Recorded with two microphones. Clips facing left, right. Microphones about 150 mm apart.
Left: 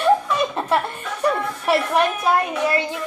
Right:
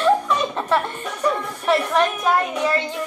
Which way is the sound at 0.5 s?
10° left (ahead or behind).